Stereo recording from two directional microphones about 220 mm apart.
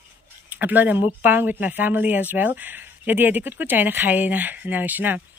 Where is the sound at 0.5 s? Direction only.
10° right (ahead or behind).